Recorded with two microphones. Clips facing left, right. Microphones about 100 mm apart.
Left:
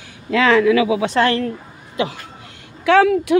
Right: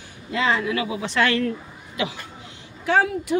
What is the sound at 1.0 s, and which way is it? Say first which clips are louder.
Speech: left 4 dB; 35° left (ahead or behind).